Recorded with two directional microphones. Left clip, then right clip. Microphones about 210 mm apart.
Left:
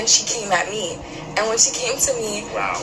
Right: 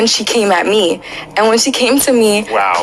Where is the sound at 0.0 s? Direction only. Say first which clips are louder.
Right 8 dB; 45° right (ahead or behind).